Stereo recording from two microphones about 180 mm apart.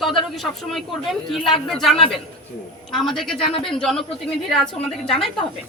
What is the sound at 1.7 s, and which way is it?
Speech, centre (ahead or behind).